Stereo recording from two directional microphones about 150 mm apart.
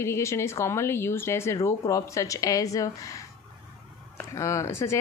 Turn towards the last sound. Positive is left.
turn(degrees=20)  # may be behind; listen again after turning